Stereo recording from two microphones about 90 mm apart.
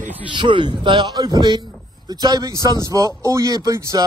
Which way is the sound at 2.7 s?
40° right (ahead or behind).